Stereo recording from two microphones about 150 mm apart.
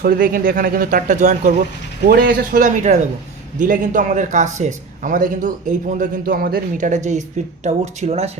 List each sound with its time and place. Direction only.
0.0 s speech: 80° right; by 1.5 s 55° right (ahead or behind)
2.0 s a man's voice: 80° right; by 8.3 s 45° right (ahead or behind)